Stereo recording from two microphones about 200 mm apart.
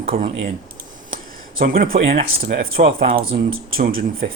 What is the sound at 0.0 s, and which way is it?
Speech, 45° right (ahead or behind).